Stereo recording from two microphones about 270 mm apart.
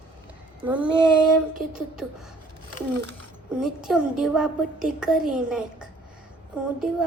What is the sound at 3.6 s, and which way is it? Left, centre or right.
A woman's voice, centre.